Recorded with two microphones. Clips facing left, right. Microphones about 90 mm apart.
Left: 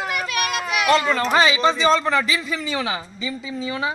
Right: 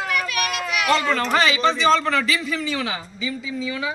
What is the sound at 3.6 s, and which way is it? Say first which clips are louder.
Speech: left 3 dB; 40° left (ahead or behind).